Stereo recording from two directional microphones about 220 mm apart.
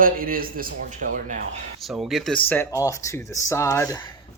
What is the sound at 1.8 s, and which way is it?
Speech, centre (ahead or behind).